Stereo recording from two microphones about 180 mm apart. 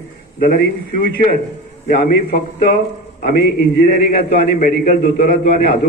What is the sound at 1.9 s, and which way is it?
A man's voice, 60° left (ahead or behind).